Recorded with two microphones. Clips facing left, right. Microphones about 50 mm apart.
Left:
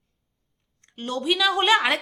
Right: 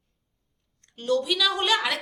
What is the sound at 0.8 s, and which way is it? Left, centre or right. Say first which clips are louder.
A woman's voice: right 5 dB; left.